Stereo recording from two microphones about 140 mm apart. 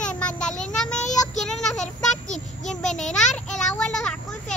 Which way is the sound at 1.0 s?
55° left (ahead or behind).